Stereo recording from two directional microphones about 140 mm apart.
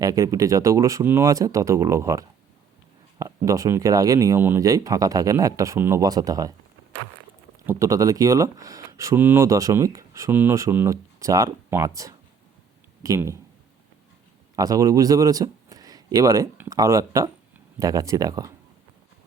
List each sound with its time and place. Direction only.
0.0 s speech: 25° right (ahead or behind)
7.7 s speech: 25° right (ahead or behind)
14.5 s a man's voice: 25° right (ahead or behind)